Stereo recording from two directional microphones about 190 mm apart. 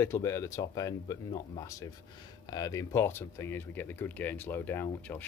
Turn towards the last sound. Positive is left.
turn(degrees=10)  # may be behind; listen again after turning